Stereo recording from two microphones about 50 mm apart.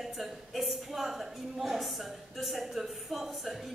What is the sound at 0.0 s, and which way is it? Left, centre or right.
A woman's voice, centre.